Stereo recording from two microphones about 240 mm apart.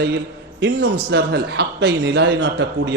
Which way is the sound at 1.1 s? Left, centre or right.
Right.